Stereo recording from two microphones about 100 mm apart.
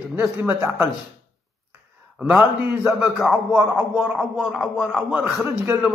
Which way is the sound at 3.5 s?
20° right (ahead or behind).